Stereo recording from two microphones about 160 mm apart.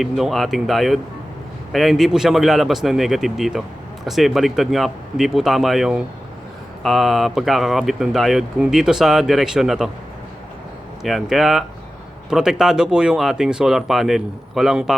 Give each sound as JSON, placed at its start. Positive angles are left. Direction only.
{"t": 0.0, "sound": "speech", "side_deg": 0}
{"t": 11.0, "sound": "speech", "side_deg": 0}